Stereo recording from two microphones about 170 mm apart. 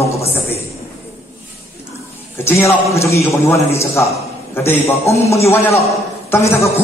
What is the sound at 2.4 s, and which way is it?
A man's voice, 15° left (ahead or behind).